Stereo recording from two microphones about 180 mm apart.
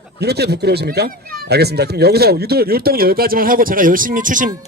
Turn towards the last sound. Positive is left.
turn(degrees=-45)  # may be behind; listen again after turning